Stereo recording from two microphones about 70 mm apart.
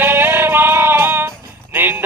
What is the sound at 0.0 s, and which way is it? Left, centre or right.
Music, right.